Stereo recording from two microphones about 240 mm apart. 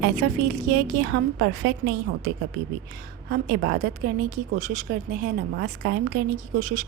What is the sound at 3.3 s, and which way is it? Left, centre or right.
A woman's voice, right.